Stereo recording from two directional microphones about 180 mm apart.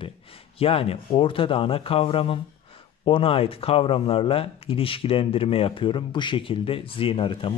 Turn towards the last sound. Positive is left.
turn(degrees=30)  # may be behind; listen again after turning